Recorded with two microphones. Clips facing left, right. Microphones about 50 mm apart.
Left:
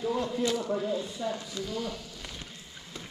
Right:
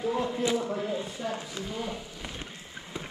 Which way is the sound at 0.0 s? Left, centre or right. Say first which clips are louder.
Right 1 dB; right.